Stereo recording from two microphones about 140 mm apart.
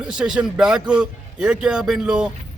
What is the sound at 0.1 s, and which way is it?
A man's voice, 5° right (ahead or behind).